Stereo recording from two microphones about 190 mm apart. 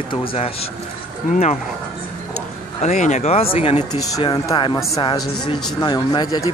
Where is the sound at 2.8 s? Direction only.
40° left (ahead or behind).